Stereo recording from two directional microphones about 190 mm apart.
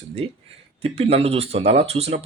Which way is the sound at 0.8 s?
30° right (ahead or behind).